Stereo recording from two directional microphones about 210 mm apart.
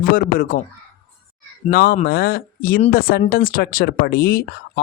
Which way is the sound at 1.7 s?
50° left (ahead or behind).